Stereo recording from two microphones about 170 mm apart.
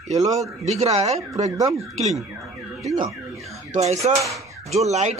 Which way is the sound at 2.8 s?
20° right (ahead or behind).